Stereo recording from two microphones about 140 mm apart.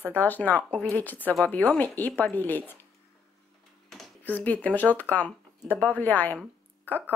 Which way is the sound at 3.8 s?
5° left (ahead or behind).